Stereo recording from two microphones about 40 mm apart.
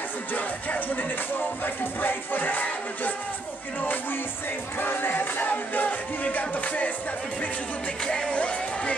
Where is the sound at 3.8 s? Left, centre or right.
Left.